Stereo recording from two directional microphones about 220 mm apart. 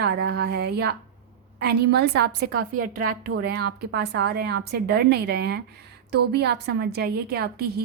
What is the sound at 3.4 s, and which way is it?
A woman's voice, 45° right (ahead or behind).